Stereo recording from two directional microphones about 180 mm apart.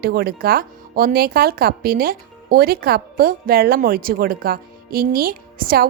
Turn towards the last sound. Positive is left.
turn(degrees=-55)  # may be behind; listen again after turning